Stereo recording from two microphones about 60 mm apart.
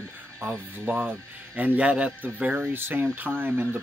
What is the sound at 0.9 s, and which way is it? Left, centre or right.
Speech, right.